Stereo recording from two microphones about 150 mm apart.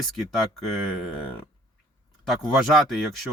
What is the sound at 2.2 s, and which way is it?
Speech, centre (ahead or behind).